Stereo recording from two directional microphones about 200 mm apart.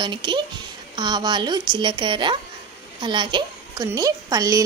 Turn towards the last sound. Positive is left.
turn(degrees=-15)  # may be behind; listen again after turning